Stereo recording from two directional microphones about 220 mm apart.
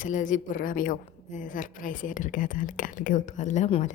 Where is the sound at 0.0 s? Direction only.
35° left (ahead or behind).